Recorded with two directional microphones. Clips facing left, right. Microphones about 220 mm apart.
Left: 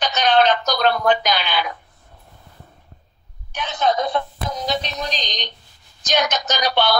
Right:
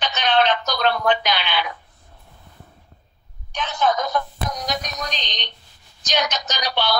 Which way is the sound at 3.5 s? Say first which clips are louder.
Even; 10° left (ahead or behind).